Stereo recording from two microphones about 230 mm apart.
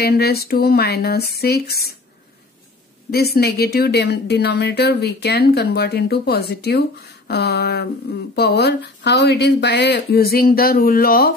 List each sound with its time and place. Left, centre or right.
0.0 s speech: left
3.1 s speech: left